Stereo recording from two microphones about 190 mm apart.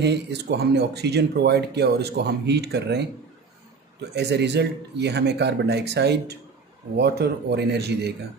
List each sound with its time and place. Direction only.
0.0 s speech: 60° right (ahead or behind)
4.1 s speech: 60° right (ahead or behind)